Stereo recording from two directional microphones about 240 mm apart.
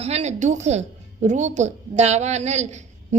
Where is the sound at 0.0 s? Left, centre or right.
Right.